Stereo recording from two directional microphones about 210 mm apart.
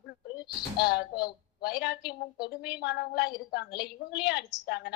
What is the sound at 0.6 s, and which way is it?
A woman's voice, 50° left (ahead or behind).